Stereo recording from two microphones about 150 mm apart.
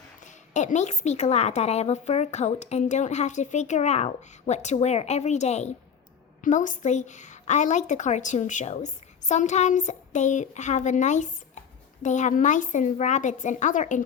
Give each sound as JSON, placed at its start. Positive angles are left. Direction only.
{"t": 0.3, "sound": "a woman's voice", "side_deg": 55}